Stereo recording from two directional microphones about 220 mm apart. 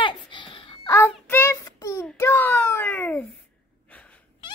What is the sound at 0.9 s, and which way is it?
Child singing, 10° left (ahead or behind).